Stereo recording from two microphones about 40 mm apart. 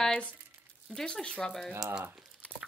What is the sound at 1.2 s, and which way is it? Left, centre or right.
Speech, left.